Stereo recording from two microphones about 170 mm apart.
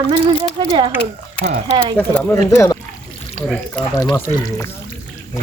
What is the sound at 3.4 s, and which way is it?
Speech, 5° left (ahead or behind).